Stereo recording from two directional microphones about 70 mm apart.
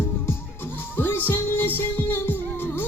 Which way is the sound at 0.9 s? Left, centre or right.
Left.